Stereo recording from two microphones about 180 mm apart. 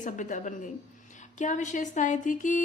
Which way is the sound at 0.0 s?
45° left (ahead or behind).